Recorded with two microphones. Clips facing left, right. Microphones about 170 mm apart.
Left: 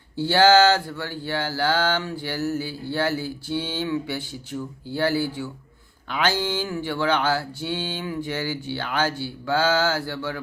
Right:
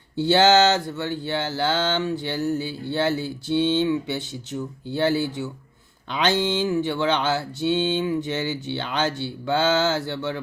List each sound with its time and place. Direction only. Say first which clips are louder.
0.2 s mantra: even; 20° right (ahead or behind)